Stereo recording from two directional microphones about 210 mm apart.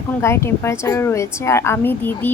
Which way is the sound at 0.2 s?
10° left (ahead or behind).